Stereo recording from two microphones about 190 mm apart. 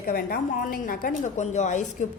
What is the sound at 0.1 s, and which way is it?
A woman's voice, 50° left (ahead or behind).